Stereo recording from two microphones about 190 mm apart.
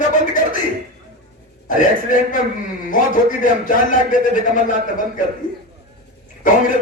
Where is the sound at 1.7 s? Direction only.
45° left (ahead or behind).